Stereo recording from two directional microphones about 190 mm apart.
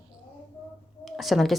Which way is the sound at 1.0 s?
Centre (ahead or behind).